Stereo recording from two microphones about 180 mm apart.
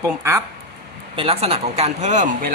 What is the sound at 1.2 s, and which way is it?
Speech, 35° right (ahead or behind).